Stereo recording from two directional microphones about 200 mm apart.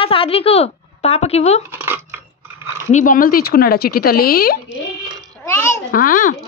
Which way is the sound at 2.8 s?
40° left (ahead or behind).